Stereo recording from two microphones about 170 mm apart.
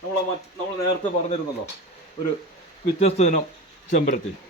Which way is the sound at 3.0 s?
40° left (ahead or behind).